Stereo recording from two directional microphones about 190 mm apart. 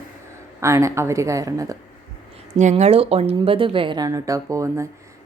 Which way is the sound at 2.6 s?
35° right (ahead or behind).